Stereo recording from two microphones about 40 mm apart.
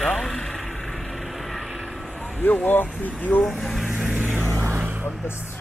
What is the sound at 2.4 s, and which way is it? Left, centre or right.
Speech, left.